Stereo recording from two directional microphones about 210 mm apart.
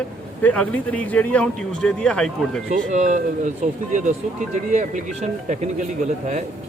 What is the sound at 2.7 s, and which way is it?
Speech, 35° right (ahead or behind).